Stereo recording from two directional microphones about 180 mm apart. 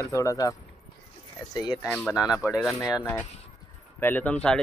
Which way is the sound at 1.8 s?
5° left (ahead or behind).